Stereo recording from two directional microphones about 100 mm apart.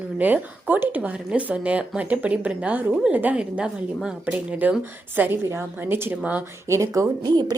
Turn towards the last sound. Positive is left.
turn(degrees=-45)  # may be behind; listen again after turning